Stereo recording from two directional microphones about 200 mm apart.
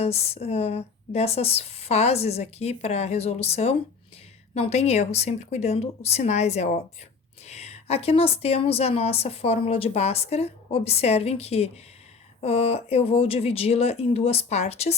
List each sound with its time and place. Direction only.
0.0 s a woman's voice: 30° left (ahead or behind)